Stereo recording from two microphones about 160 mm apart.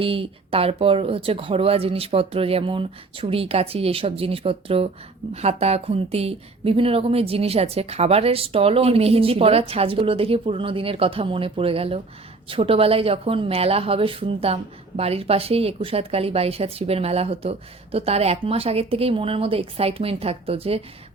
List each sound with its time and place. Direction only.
0.0 s a woman's voice: 35° right (ahead or behind)